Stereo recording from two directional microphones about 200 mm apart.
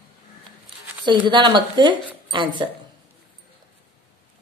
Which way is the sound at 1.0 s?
25° right (ahead or behind).